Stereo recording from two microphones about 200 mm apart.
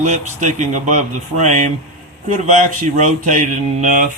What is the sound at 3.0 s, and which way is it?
Speech, 40° right (ahead or behind).